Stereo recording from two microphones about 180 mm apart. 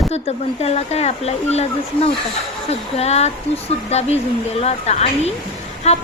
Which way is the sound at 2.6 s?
35° left (ahead or behind).